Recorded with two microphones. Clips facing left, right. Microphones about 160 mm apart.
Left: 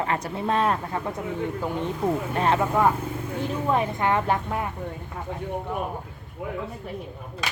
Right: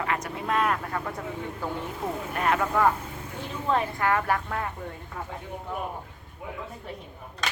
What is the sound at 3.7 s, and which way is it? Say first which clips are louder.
Speech: left 1 dB; 20° left (ahead or behind).